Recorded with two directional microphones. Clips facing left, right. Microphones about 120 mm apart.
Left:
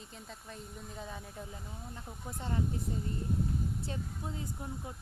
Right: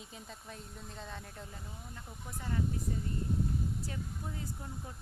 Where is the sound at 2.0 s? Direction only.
20° left (ahead or behind).